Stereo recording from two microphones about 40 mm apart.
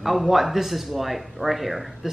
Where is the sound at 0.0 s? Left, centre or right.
Centre.